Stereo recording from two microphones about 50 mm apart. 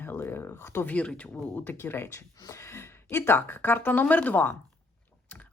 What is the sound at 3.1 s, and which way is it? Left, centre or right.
Speech, left.